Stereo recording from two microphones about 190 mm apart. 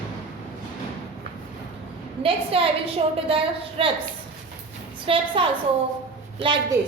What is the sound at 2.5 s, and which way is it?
A woman's voice, 30° right (ahead or behind).